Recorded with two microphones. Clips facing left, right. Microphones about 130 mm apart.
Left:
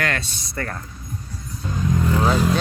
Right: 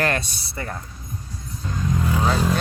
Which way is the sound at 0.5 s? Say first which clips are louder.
Left 2 dB; 15° right (ahead or behind).